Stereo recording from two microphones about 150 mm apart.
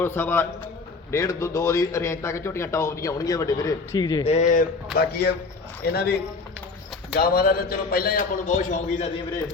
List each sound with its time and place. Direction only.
0.0 s a man's voice: 15° left (ahead or behind)
4.3 s speech: 55° left (ahead or behind)
4.9 s a man's voice: 90° left; by 9.0 s 55° left (ahead or behind)